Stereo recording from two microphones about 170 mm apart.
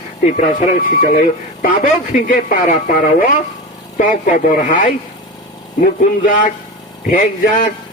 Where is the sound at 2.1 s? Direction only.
55° left (ahead or behind).